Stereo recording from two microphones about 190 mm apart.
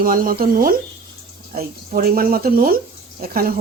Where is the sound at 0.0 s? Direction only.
45° right (ahead or behind).